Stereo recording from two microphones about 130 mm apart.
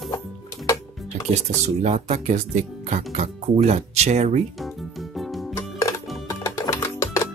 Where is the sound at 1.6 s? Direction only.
55° right (ahead or behind).